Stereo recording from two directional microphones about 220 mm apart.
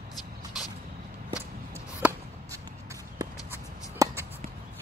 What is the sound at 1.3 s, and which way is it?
Chop, 10° right (ahead or behind).